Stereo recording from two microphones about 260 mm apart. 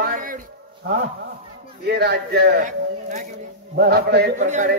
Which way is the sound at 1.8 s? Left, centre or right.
Right.